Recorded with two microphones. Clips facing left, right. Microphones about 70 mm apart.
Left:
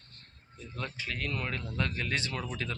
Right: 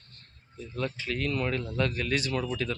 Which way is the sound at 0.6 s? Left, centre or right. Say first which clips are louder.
Right 6 dB; centre.